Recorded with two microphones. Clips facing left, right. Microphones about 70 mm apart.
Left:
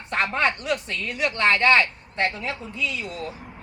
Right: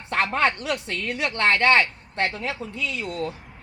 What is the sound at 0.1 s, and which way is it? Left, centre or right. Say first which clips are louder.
Speech: right 1 dB; right.